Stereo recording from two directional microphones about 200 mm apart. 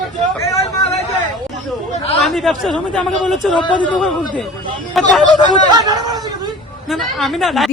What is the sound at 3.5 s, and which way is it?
Speech, 25° left (ahead or behind).